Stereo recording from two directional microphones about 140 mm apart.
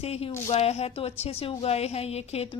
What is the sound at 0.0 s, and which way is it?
Speech, 50° left (ahead or behind).